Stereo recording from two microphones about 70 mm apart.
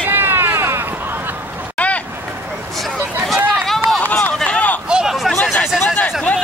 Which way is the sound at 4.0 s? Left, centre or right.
Centre.